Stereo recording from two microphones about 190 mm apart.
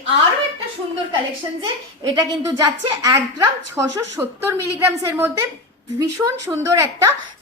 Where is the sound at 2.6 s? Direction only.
15° right (ahead or behind).